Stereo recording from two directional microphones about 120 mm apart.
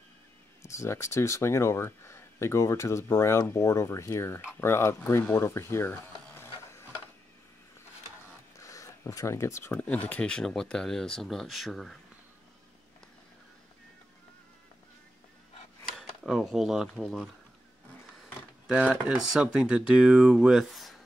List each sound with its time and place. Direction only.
0.6 s speech: 25° left (ahead or behind)
8.5 s speech: 25° left (ahead or behind); by 12.0 s centre (ahead or behind)
16.0 s speech: centre (ahead or behind)
18.7 s speech: 10° right (ahead or behind)